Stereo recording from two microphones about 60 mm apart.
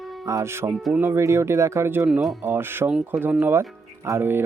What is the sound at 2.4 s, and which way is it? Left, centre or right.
Speech, right.